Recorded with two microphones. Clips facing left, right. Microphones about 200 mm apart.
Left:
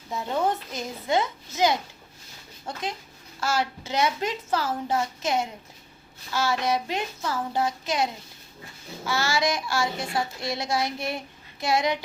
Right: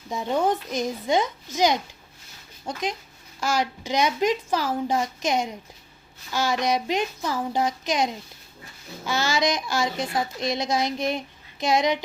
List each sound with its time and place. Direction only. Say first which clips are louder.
0.1 s a woman's voice: right 3 dB; 15° right (ahead or behind)